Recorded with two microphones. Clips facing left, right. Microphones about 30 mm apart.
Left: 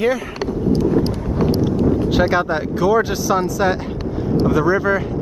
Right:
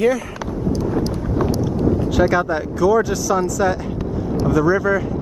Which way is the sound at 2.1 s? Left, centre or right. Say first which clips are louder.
Even; left.